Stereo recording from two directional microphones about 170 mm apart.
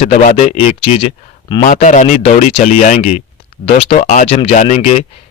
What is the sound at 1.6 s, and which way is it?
Speech, 45° left (ahead or behind).